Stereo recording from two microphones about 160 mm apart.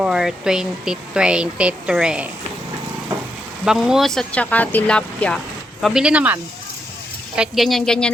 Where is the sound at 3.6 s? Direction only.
5° right (ahead or behind).